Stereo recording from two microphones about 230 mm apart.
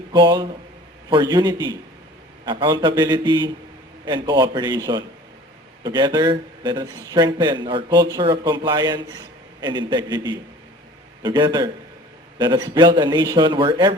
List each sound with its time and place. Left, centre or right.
0.1 s a man's voice: centre